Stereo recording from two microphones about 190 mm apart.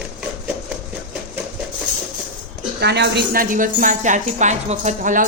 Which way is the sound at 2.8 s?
60° right (ahead or behind).